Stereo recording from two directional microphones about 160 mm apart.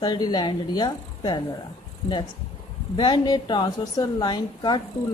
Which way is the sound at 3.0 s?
30° left (ahead or behind).